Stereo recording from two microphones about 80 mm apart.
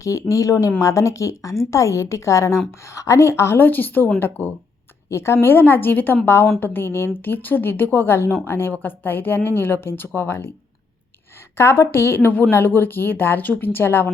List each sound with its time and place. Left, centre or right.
0.0 s a woman's voice: left
5.0 s a woman's voice: left
11.5 s speech: left